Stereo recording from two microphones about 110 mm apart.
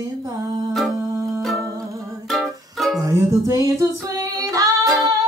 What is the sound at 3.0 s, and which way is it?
Music, 30° right (ahead or behind).